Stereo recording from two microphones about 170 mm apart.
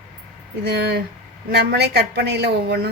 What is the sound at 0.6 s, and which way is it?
A woman's voice, 80° right.